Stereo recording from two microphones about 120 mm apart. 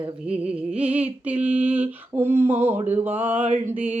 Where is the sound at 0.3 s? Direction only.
10° right (ahead or behind).